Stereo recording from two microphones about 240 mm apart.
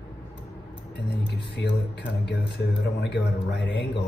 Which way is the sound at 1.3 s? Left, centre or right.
Left.